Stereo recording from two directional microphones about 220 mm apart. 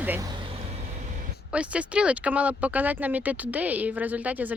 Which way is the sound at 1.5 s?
5° right (ahead or behind).